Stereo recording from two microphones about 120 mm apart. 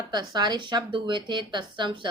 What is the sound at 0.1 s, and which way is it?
Speech, 35° right (ahead or behind).